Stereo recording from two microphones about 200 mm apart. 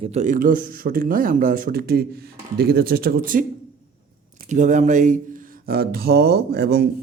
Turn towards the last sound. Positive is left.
turn(degrees=-55)  # may be behind; listen again after turning